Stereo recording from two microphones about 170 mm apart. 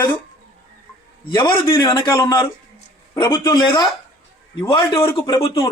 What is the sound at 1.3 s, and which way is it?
A man's voice, 25° left (ahead or behind).